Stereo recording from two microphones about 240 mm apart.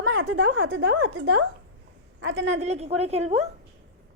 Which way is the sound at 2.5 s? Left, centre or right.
Right.